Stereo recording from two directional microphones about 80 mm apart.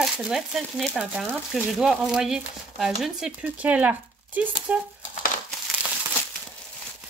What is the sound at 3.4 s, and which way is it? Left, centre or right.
Speech, centre.